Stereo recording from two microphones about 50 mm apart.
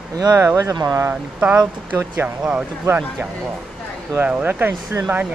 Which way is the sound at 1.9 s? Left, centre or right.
Right.